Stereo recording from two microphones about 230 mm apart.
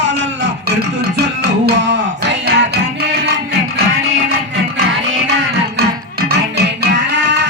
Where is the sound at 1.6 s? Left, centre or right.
Right.